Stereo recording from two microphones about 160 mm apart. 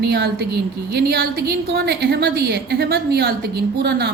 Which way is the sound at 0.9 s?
75° right (ahead or behind).